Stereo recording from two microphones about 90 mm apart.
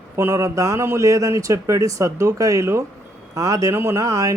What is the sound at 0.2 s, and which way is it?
Speech, 30° right (ahead or behind).